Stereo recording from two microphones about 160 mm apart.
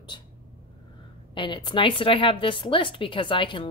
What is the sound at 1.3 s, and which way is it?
A woman's voice, 30° left (ahead or behind).